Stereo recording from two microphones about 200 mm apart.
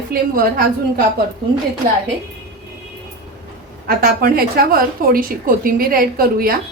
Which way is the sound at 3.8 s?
50° right (ahead or behind).